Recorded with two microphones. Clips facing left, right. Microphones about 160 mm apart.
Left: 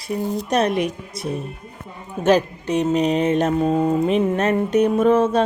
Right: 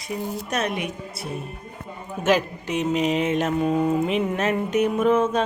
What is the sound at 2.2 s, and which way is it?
Mantra, 35° left (ahead or behind).